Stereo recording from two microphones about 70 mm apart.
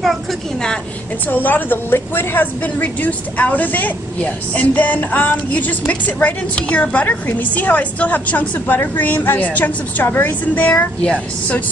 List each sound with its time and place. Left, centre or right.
0.0 s a woman's voice: centre
1.2 s a woman's voice: left